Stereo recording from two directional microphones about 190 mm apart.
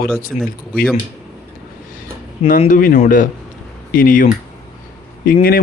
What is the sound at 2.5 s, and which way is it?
Speech, 45° left (ahead or behind).